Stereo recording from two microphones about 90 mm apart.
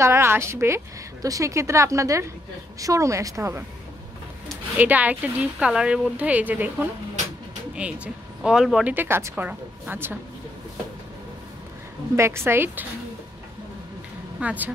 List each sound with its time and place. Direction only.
0.0 s a woman's voice: 25° right (ahead or behind)
4.7 s speech: 20° right (ahead or behind)
8.8 s speech: 25° right (ahead or behind)
12.2 s speech: 30° right (ahead or behind)
14.4 s speech: 15° right (ahead or behind)